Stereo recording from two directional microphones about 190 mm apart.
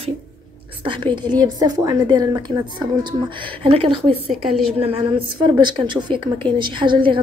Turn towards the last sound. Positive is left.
turn(degrees=-25)  # may be behind; listen again after turning